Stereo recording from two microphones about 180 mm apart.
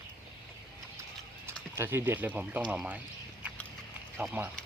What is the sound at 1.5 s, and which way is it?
Speech, 15° right (ahead or behind).